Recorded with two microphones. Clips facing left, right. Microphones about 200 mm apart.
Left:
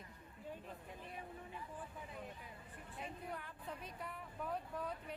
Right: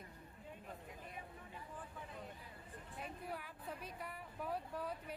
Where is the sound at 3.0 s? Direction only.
5° right (ahead or behind).